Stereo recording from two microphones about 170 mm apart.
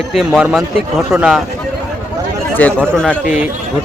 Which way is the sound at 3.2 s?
5° right (ahead or behind).